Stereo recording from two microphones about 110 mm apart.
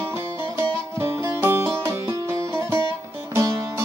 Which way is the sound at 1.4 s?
20° right (ahead or behind).